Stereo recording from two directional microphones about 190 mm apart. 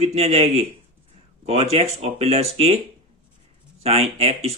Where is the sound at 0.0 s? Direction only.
35° right (ahead or behind).